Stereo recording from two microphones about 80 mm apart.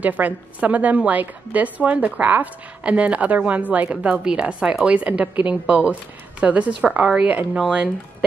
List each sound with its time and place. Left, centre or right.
0.0 s a woman's voice: centre